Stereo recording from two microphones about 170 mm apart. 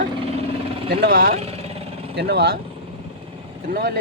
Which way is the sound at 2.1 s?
70° right (ahead or behind).